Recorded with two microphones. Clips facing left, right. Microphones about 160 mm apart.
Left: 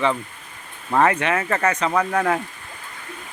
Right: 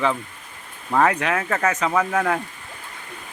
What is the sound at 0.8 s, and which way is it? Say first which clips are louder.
Speech: left 1 dB; centre (ahead or behind).